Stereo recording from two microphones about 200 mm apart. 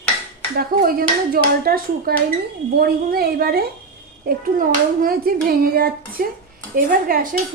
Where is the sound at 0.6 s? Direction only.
45° right (ahead or behind).